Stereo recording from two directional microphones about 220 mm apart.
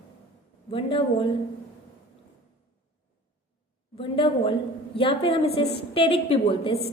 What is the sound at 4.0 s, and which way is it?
A woman's voice, 25° left (ahead or behind).